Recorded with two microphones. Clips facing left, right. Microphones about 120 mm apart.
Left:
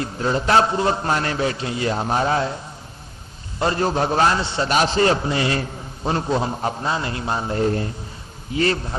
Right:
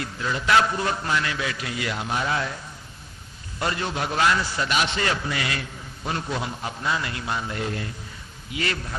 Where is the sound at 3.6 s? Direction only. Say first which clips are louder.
Left 7 dB; 35° left (ahead or behind).